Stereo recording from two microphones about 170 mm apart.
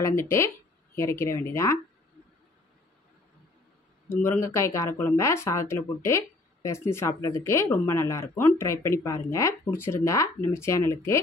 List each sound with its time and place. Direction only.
0.0 s speech: 15° left (ahead or behind)
4.1 s speech: 15° left (ahead or behind)